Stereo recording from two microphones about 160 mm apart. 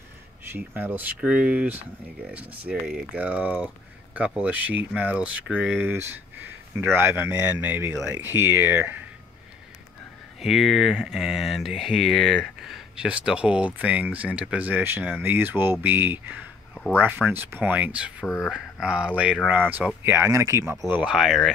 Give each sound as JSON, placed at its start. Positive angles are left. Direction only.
{"t": 0.5, "sound": "speech", "side_deg": -10}
{"t": 10.4, "sound": "speech", "side_deg": 0}
{"t": 20.9, "sound": "speech", "side_deg": -5}